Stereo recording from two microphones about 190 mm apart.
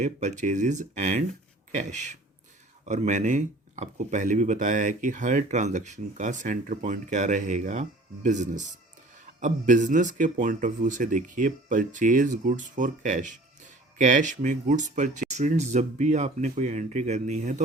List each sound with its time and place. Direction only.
0.0 s speech: 40° right (ahead or behind)